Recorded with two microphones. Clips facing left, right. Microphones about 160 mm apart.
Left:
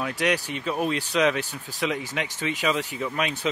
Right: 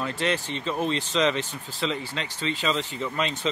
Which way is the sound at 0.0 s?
10° left (ahead or behind).